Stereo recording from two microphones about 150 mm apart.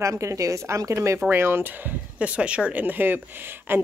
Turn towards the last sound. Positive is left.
turn(degrees=-15)  # may be behind; listen again after turning